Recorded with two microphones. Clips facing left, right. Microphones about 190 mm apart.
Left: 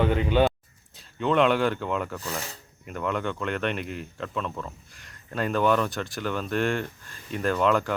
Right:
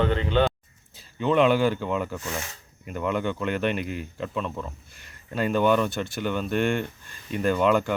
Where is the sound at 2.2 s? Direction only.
35° left (ahead or behind).